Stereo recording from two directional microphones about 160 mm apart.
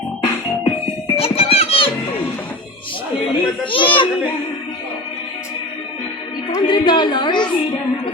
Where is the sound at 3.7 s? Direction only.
30° left (ahead or behind).